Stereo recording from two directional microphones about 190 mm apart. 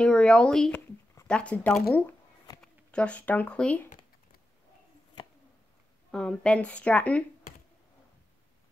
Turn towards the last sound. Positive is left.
turn(degrees=5)  # may be behind; listen again after turning